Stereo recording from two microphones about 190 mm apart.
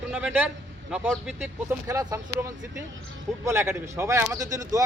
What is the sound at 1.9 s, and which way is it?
Speech, 15° right (ahead or behind).